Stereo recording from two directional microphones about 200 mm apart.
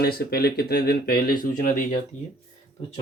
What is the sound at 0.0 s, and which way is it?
Speech, 50° left (ahead or behind).